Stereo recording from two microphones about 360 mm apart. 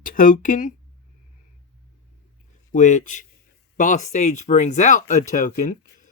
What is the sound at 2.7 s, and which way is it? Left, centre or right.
Speech, left.